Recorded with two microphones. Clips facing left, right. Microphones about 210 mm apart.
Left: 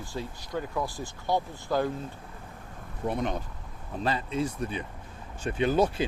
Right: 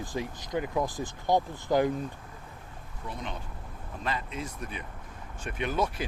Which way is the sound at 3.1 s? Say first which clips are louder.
Left 9 dB; 50° left (ahead or behind).